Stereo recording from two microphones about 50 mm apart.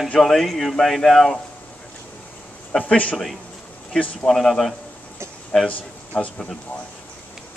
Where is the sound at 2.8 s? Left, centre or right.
Left.